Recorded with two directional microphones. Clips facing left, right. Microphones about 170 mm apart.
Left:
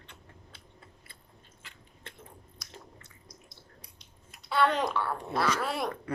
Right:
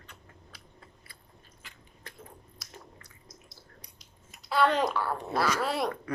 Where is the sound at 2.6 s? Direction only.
Centre (ahead or behind).